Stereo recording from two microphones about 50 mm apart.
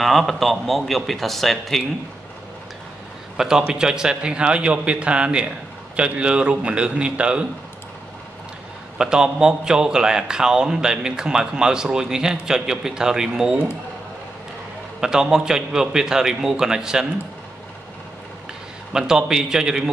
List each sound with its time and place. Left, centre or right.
0.0 s a man's voice: centre
3.3 s a man's voice: centre
8.9 s a man's voice: centre
15.0 s a man's voice: centre
18.9 s a man's voice: centre